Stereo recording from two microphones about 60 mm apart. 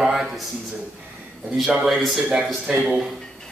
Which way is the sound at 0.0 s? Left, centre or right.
Centre.